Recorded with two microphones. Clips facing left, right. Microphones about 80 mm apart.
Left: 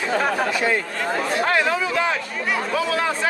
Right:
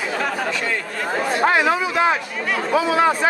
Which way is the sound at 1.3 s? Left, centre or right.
Centre.